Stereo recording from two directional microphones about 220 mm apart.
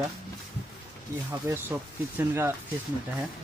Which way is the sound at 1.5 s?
10° right (ahead or behind).